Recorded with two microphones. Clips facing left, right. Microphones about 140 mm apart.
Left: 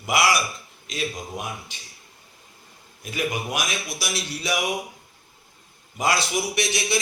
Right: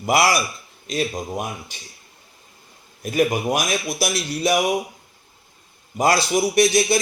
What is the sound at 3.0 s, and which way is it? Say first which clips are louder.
A man's voice: right 8 dB; 45° right (ahead or behind).